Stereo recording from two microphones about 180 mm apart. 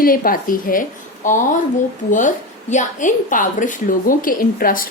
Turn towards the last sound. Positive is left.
turn(degrees=50)  # may be behind; listen again after turning